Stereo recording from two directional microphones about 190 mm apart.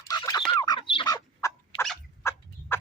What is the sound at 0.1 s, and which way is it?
Fowl, 20° left (ahead or behind).